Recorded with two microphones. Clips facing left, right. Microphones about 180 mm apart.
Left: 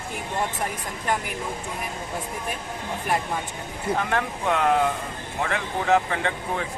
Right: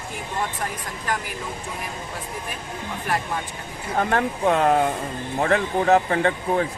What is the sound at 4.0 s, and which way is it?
Speech, 40° right (ahead or behind).